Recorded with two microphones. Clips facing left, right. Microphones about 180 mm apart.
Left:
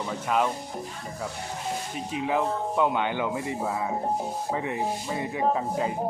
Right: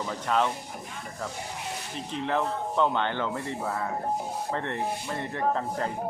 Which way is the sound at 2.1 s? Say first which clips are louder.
Left 2 dB; 10° left (ahead or behind).